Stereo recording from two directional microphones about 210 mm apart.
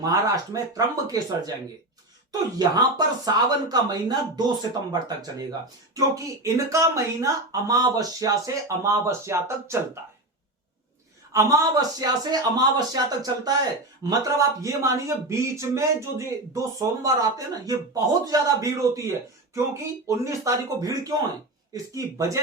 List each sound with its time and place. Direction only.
0.0 s speech: 15° right (ahead or behind)
3.2 s speech: 20° right (ahead or behind)
11.3 s speech: 15° right (ahead or behind)